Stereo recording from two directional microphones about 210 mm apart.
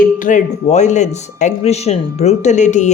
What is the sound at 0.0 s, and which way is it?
Speech, 40° left (ahead or behind).